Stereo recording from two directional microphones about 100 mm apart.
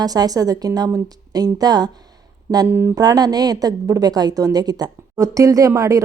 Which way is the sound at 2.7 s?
25° right (ahead or behind).